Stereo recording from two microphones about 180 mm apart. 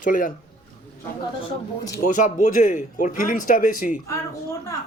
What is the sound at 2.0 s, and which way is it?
Speech, 40° left (ahead or behind).